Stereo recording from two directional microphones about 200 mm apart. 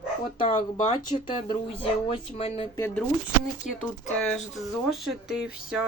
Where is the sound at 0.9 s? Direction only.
25° left (ahead or behind).